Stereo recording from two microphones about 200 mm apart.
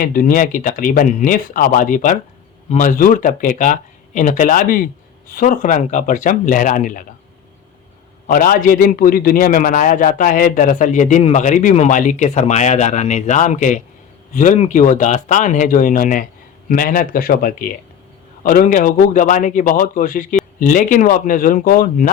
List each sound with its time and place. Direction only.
0.0 s a man's voice: 45° left (ahead or behind)
8.3 s a man's voice: 45° left (ahead or behind)